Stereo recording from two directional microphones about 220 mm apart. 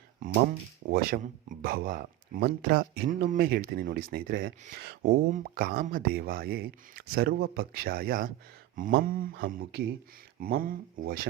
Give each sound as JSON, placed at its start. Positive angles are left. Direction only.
{"t": 0.9, "sound": "speech", "side_deg": -40}